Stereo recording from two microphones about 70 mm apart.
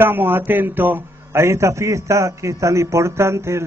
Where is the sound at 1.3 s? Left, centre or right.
Right.